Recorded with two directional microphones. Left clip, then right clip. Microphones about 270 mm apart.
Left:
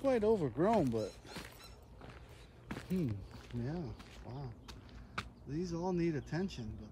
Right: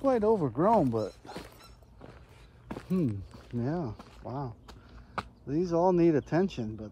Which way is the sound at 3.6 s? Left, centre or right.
Centre.